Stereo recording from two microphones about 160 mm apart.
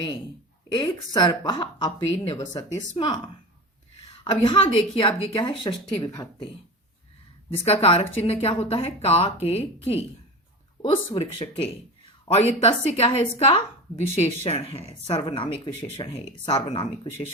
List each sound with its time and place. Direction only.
0.7 s a woman's voice: 25° left (ahead or behind)
4.2 s a woman's voice: 30° left (ahead or behind)
7.5 s a woman's voice: 40° left (ahead or behind)